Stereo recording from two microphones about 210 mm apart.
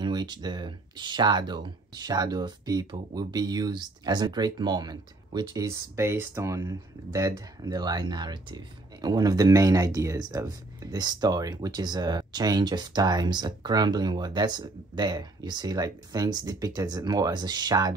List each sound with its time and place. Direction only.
0.0 s speech: 20° right (ahead or behind)